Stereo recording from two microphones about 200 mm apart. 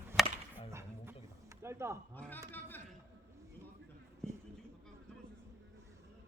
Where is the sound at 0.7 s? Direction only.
15° right (ahead or behind).